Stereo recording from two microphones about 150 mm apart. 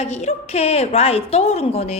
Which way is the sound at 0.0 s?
45° left (ahead or behind).